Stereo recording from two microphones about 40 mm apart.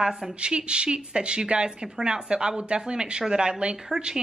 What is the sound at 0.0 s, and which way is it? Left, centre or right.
A woman's voice, centre.